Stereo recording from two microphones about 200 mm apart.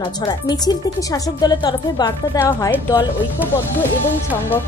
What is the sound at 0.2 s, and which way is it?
A woman's voice, 20° left (ahead or behind).